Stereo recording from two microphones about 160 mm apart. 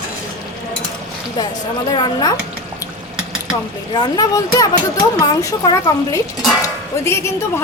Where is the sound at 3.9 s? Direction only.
25° left (ahead or behind).